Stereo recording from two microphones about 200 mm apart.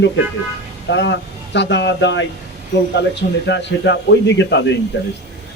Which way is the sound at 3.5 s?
60° left (ahead or behind).